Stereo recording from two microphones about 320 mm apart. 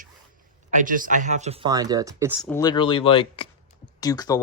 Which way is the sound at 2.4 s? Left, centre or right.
Centre.